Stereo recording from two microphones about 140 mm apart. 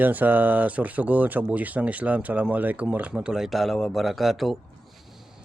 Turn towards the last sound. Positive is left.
turn(degrees=0)  # may be behind; listen again after turning